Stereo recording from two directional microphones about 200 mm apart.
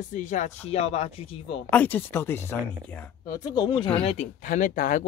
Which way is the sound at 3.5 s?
20° left (ahead or behind).